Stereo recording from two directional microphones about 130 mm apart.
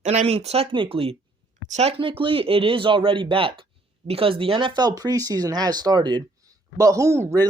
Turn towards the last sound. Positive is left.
turn(degrees=-20)  # may be behind; listen again after turning